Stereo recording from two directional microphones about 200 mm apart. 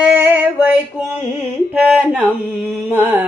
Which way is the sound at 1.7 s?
5° right (ahead or behind).